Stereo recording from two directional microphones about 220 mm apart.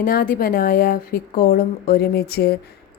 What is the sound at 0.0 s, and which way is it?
Speech, 40° left (ahead or behind).